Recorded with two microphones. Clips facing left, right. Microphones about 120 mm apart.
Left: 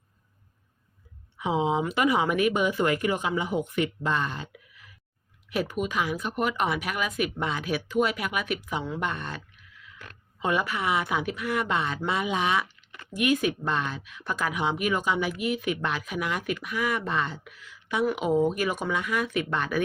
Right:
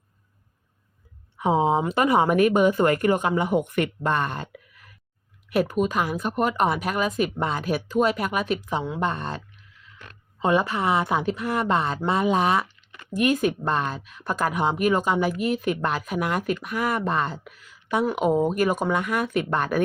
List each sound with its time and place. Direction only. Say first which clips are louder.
1.4 s speech: right 4 dB; 45° right (ahead or behind)
5.7 s speech: right 4 dB; 40° right (ahead or behind)
10.4 s speech: right 5 dB; 30° right (ahead or behind); by 19.8 s 45° right (ahead or behind)